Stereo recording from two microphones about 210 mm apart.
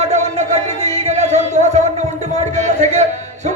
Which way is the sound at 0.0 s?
35° right (ahead or behind).